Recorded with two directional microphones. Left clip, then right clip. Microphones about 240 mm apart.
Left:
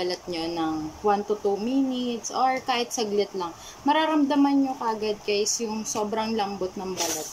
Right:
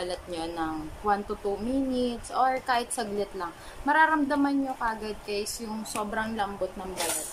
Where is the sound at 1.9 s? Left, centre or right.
Centre.